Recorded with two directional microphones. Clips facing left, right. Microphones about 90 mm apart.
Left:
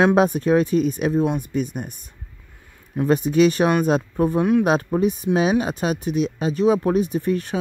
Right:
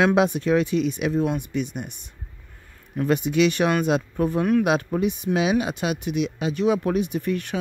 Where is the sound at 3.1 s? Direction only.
40° left (ahead or behind).